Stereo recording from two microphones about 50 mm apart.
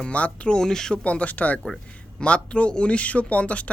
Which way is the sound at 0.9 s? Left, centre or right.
Left.